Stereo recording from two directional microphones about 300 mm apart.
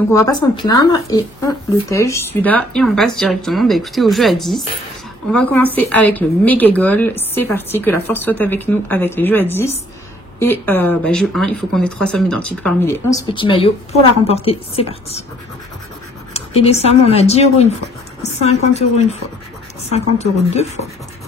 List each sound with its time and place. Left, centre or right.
0.1 s a woman's voice: centre
16.3 s a woman's voice: centre